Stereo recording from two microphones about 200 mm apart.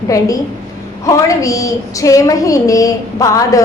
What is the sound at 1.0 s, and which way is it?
A woman's voice, 15° left (ahead or behind).